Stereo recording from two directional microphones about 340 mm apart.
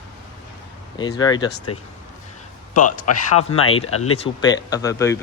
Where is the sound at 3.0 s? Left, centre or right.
Left.